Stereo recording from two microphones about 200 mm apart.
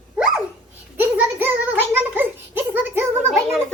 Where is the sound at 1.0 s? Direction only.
10° right (ahead or behind).